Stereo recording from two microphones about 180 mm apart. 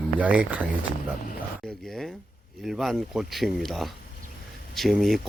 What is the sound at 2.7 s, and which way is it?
Speech, centre (ahead or behind).